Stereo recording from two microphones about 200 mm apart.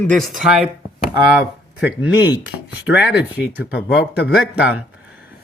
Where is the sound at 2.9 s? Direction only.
60° left (ahead or behind).